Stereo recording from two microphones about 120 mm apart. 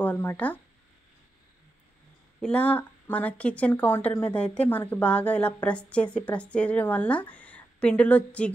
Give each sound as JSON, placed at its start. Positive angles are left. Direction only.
{"t": 0.0, "sound": "speech", "side_deg": 15}
{"t": 2.4, "sound": "speech", "side_deg": 10}